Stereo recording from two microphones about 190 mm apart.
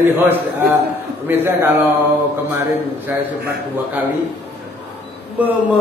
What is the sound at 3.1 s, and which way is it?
Speech, 10° right (ahead or behind).